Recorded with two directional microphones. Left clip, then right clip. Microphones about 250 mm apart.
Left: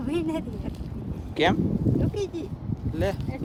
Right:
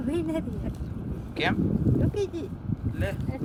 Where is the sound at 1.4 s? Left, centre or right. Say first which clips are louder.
Left 5 dB; left.